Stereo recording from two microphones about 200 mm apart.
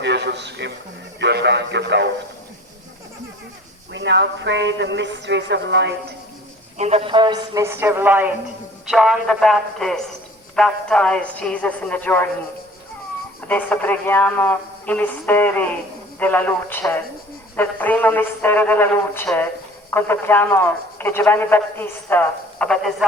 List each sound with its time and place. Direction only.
0.0 s a man's voice: 60° right (ahead or behind)
3.9 s speech: 60° right (ahead or behind)
6.7 s a woman's voice: 30° right (ahead or behind); by 12.3 s 10° left (ahead or behind)
13.5 s a man's voice: 10° left (ahead or behind)